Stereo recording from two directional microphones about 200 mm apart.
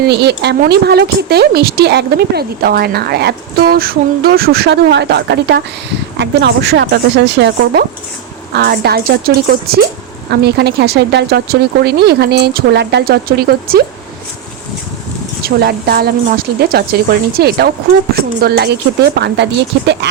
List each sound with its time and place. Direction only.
0.1 s speech: 55° right (ahead or behind)
15.4 s speech: 50° right (ahead or behind)